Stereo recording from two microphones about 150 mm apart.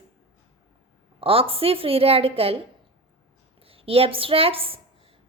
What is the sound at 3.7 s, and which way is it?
A woman's voice, 40° right (ahead or behind).